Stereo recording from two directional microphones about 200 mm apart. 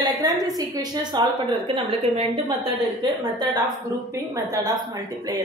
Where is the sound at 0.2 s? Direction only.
20° right (ahead or behind).